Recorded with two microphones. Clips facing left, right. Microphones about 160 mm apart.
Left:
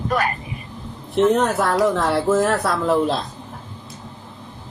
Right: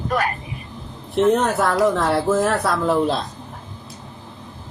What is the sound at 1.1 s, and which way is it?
Speech, centre (ahead or behind).